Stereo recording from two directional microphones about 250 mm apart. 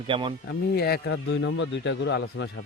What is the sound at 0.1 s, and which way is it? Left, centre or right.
Speech, centre.